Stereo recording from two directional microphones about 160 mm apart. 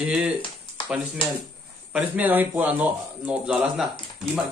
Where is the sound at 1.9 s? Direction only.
10° right (ahead or behind).